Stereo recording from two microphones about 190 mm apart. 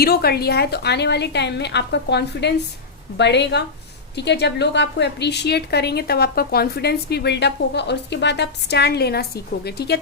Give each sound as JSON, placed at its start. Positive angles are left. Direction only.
{"t": 0.0, "sound": "a woman's voice", "side_deg": 55}